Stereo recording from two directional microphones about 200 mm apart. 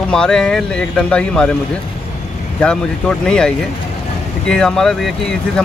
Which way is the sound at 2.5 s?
5° left (ahead or behind).